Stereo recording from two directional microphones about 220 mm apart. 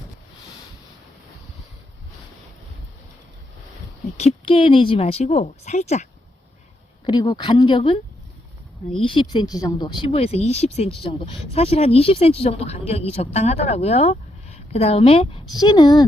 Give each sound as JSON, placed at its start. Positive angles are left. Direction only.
{"t": 4.2, "sound": "a woman's voice", "side_deg": 25}
{"t": 7.0, "sound": "a woman's voice", "side_deg": 20}
{"t": 9.0, "sound": "a woman's voice", "side_deg": 20}